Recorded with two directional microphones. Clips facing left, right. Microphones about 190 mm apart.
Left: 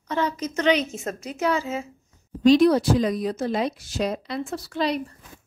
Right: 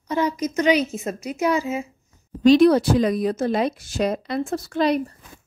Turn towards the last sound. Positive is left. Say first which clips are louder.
# right 5 dB
turn(degrees=-50)  # may be behind; listen again after turning